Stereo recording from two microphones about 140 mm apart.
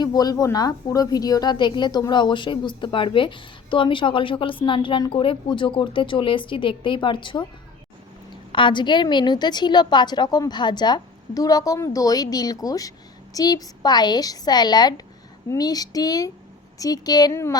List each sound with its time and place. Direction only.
0.0 s a woman's voice: 30° left (ahead or behind)
8.5 s a woman's voice: 35° left (ahead or behind)